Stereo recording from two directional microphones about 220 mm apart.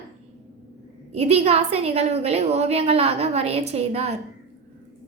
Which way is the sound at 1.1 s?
30° right (ahead or behind).